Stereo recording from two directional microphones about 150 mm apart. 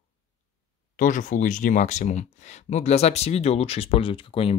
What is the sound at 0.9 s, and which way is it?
Speech, 60° left (ahead or behind).